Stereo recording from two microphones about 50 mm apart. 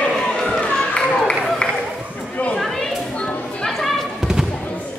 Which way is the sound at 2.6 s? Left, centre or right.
Centre.